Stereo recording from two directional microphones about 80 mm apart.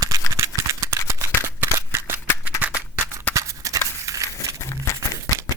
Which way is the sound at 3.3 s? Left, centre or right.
Right.